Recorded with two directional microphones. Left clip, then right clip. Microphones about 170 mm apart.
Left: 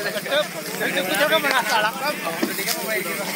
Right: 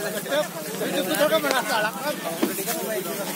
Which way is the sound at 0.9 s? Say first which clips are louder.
Left 1 dB; 60° right (ahead or behind).